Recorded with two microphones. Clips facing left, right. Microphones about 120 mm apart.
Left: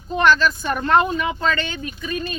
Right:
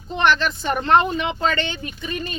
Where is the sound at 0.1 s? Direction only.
20° right (ahead or behind).